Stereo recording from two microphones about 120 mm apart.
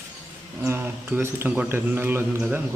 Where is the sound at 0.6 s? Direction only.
20° right (ahead or behind).